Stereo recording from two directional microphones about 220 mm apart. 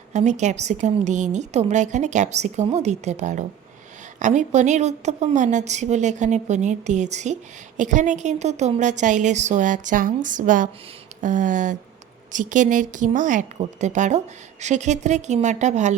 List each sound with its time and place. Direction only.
0.1 s a woman's voice: 30° right (ahead or behind)